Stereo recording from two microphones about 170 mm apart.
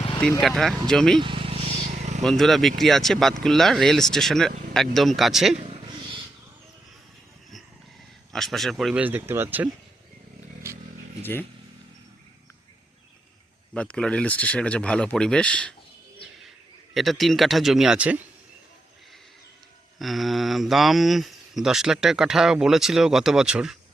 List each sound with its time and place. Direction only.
0.2 s speech: 5° left (ahead or behind)
1.2 s vehicle: 30° right (ahead or behind)
2.2 s speech: centre (ahead or behind)
5.5 s purr: 35° right (ahead or behind)
8.3 s speech: centre (ahead or behind)
11.2 s speech: 10° left (ahead or behind)
13.7 s speech: 5° left (ahead or behind)
16.9 s speech: centre (ahead or behind)
20.0 s speech: centre (ahead or behind)